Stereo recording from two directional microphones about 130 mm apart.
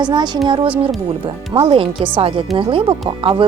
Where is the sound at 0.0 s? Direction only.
35° right (ahead or behind).